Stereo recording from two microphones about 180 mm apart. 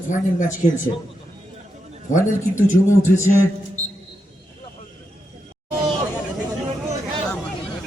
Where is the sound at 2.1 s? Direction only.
45° left (ahead or behind).